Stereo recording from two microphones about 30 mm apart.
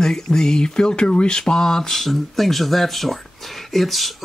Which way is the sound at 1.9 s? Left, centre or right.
Centre.